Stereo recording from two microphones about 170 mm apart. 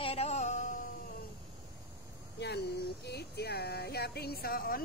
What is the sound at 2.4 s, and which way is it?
Speech, 75° left (ahead or behind).